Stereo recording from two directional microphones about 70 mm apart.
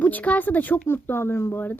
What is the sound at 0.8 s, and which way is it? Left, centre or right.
Speech, left.